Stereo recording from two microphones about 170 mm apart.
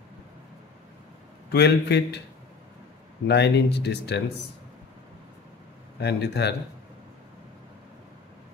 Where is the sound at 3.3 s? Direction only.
80° left.